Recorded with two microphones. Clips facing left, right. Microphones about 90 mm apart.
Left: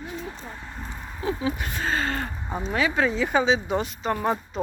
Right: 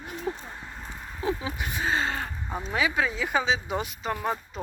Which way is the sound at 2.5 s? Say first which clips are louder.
Left 3 dB; 15° left (ahead or behind).